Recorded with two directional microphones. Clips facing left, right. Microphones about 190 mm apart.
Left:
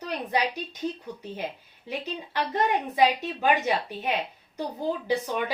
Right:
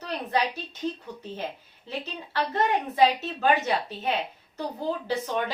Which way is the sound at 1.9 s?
15° left (ahead or behind).